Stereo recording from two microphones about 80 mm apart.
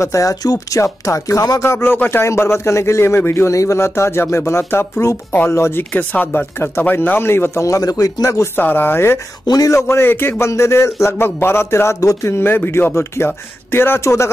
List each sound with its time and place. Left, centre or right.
0.0 s a man's voice: left
1.6 s a man's voice: left
5.9 s speech: centre
7.6 s speech: left
8.5 s speech: left
9.5 s a man's voice: left